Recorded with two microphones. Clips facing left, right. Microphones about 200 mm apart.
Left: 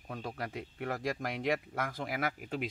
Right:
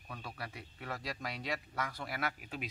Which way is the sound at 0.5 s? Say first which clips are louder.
Left 7 dB; 65° left (ahead or behind).